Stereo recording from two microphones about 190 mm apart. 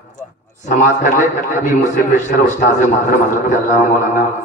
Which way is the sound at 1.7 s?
40° left (ahead or behind).